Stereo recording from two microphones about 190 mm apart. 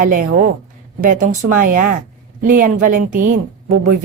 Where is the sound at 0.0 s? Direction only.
45° right (ahead or behind).